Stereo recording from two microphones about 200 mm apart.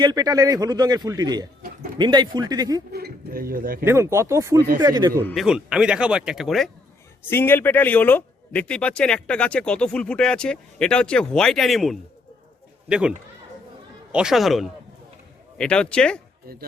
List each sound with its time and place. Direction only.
0.0 s a man's voice: 20° right (ahead or behind)
2.9 s speech: 50° right (ahead or behind)
3.8 s a man's voice: 15° right (ahead or behind)
5.3 s speech: centre (ahead or behind)
7.3 s speech: 10° left (ahead or behind)